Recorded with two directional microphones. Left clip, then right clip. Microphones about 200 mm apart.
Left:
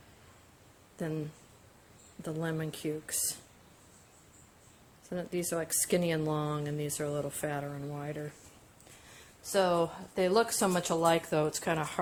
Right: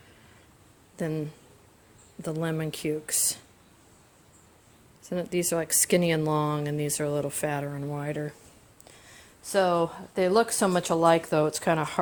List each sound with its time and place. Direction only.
0.9 s speech: 30° right (ahead or behind)
2.2 s speech: 30° right (ahead or behind)
5.0 s speech: 30° right (ahead or behind)
9.4 s speech: 35° right (ahead or behind)